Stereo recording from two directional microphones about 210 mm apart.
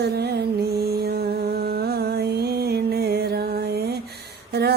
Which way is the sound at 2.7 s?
50° right (ahead or behind).